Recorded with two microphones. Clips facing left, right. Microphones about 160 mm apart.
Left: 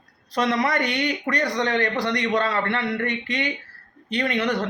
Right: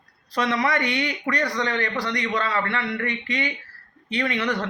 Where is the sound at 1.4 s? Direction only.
20° left (ahead or behind).